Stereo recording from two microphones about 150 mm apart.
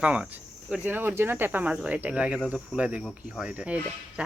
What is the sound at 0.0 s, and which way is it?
A woman's voice, 5° right (ahead or behind).